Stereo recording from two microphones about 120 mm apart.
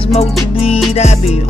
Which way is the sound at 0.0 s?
60° left (ahead or behind).